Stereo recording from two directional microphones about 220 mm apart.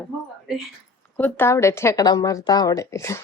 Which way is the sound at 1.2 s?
10° left (ahead or behind).